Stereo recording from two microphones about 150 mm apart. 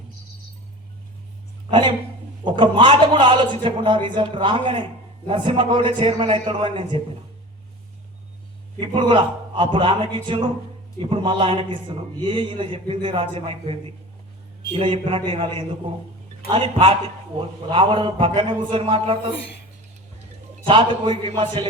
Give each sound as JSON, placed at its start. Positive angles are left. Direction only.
{"t": 2.4, "sound": "a man's voice", "side_deg": -35}
{"t": 8.8, "sound": "a man's voice", "side_deg": -35}
{"t": 20.7, "sound": "a man's voice", "side_deg": -35}